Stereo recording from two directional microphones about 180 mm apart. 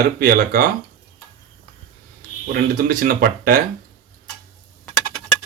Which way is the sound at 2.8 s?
50° right (ahead or behind).